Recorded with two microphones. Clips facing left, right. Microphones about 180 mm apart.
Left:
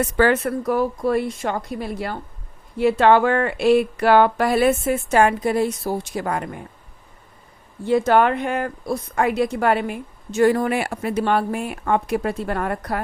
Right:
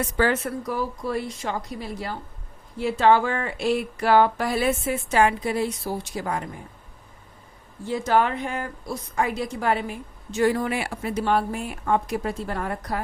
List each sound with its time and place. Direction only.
0.0 s speech: 60° left (ahead or behind)
7.9 s speech: 65° left (ahead or behind)
10.3 s speech: 50° left (ahead or behind)